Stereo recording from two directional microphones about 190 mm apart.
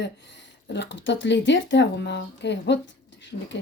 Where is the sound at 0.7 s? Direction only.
65° left (ahead or behind).